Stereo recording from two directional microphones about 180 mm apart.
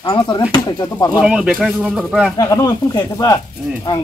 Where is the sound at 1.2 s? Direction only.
5° right (ahead or behind).